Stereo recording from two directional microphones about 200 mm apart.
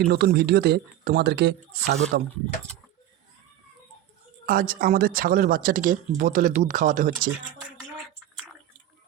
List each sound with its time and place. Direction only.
0.1 s speech: 55° right (ahead or behind)
4.4 s speech: 45° right (ahead or behind)